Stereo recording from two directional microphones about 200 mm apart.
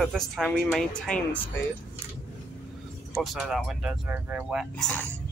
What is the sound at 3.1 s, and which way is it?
Speech, centre (ahead or behind).